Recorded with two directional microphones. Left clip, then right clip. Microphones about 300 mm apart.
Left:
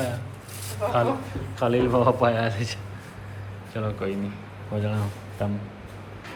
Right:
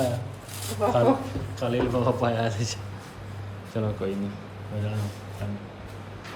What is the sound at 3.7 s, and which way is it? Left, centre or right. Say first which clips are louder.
Speech: even; centre.